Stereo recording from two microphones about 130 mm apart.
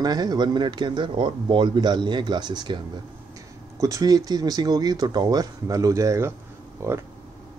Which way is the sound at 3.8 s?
25° right (ahead or behind).